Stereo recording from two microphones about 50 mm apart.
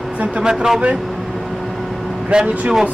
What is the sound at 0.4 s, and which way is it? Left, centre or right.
Speech, centre.